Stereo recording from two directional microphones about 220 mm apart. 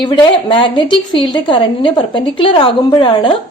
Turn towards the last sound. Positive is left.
turn(degrees=20)  # may be behind; listen again after turning